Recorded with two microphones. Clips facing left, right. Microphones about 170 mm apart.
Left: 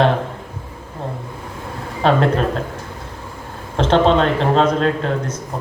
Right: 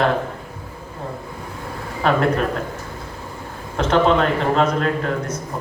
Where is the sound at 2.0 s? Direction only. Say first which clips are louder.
Left 2 dB; 30° left (ahead or behind).